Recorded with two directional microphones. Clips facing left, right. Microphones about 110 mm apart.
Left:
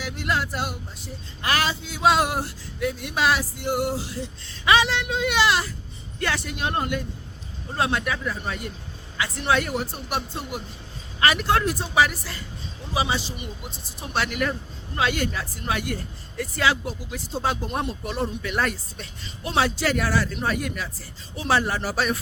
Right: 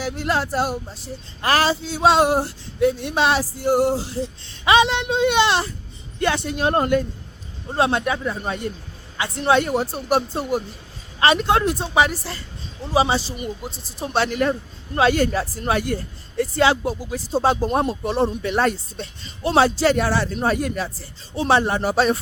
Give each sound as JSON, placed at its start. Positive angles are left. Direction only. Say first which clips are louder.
{"t": 0.0, "sound": "speech", "louder": "right 4 dB", "side_deg": -35}
{"t": 7.7, "sound": "speech", "louder": "right 5 dB", "side_deg": -30}
{"t": 11.2, "sound": "speech", "louder": "right 4 dB", "side_deg": -25}